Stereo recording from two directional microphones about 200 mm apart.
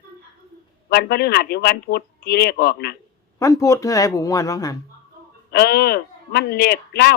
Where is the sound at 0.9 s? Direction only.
55° left (ahead or behind).